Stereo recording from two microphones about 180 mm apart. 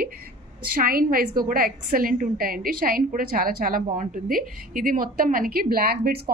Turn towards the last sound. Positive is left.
turn(degrees=-60)  # may be behind; listen again after turning